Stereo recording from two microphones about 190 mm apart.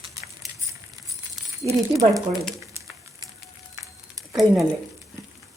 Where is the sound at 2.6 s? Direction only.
15° right (ahead or behind).